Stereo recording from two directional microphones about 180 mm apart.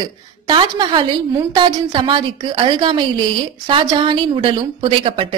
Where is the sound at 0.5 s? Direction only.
25° right (ahead or behind).